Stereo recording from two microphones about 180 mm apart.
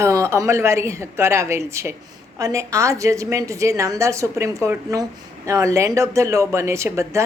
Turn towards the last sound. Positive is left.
turn(degrees=-15)  # may be behind; listen again after turning